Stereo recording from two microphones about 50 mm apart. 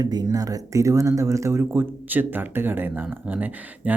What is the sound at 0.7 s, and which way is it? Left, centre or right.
Speech, right.